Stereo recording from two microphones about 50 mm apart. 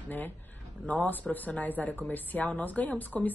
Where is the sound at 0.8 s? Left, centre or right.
Left.